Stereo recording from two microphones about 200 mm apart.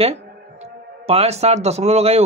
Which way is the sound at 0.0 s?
30° right (ahead or behind).